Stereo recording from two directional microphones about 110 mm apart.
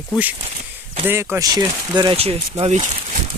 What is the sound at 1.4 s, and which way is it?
Speech, 35° right (ahead or behind).